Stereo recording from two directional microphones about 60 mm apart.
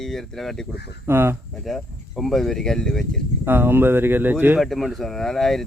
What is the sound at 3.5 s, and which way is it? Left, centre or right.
Speech, right.